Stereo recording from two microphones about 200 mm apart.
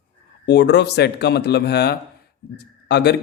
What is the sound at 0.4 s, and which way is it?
A man's voice, 60° left (ahead or behind).